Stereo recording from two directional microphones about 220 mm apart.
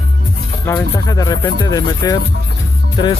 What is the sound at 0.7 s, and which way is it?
Music, 15° left (ahead or behind).